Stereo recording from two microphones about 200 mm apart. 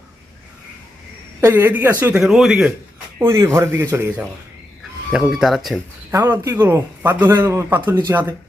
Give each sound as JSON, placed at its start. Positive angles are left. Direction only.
{"t": 1.4, "sound": "speech", "side_deg": -10}
{"t": 3.2, "sound": "speech", "side_deg": -15}
{"t": 6.1, "sound": "speech", "side_deg": -10}